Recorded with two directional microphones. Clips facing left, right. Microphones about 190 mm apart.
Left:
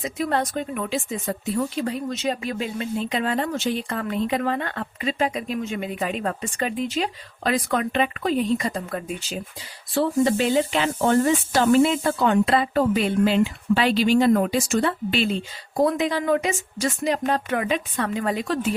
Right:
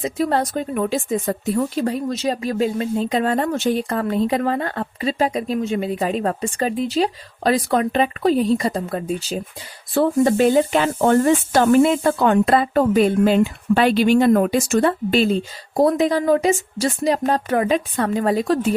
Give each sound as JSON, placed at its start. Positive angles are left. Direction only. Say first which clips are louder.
{"t": 0.0, "sound": "speech", "louder": "right 4 dB", "side_deg": -35}
{"t": 9.9, "sound": "speech", "louder": "right 4 dB", "side_deg": -50}